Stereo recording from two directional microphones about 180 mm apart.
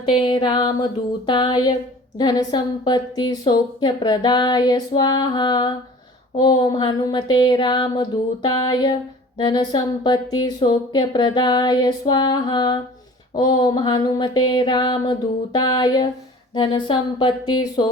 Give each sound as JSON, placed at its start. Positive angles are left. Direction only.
{"t": 0.2, "sound": "a woman's voice", "side_deg": 25}